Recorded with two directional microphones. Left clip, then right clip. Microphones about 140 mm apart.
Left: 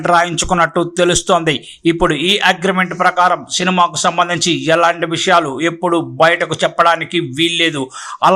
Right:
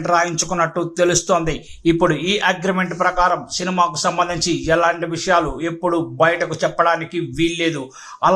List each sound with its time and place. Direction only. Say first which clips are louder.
0.0 s a man's voice: left 5 dB; 20° left (ahead or behind)